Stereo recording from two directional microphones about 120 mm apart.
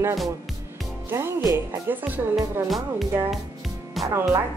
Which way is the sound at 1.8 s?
15° right (ahead or behind).